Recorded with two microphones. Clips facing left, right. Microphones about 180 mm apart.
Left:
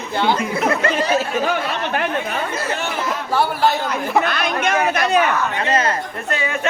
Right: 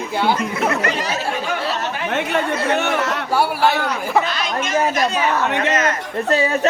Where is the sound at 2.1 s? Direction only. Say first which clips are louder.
Right 3 dB; 75° right (ahead or behind).